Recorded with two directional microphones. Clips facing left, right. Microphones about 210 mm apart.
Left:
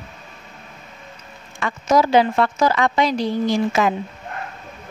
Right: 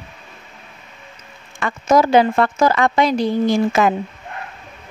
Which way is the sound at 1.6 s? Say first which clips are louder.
Right 2 dB; 50° right (ahead or behind).